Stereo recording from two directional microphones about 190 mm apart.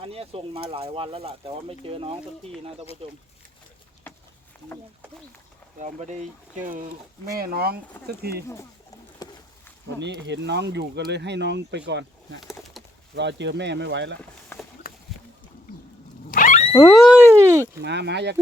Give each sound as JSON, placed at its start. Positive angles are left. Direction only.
{"t": 0.0, "sound": "speech", "side_deg": -30}
{"t": 5.8, "sound": "speech", "side_deg": -40}
{"t": 7.3, "sound": "speech", "side_deg": -55}
{"t": 9.2, "sound": "a sound", "side_deg": 20}
{"t": 10.0, "sound": "speech", "side_deg": -65}
{"t": 12.4, "sound": "pigeon", "side_deg": 0}
{"t": 13.1, "sound": "speech", "side_deg": -65}
{"t": 14.5, "sound": "run", "side_deg": 10}
{"t": 16.3, "sound": "a sound", "side_deg": 45}
{"t": 16.7, "sound": "a sound", "side_deg": 15}
{"t": 17.0, "sound": "a sound", "side_deg": -10}
{"t": 17.7, "sound": "speech", "side_deg": -65}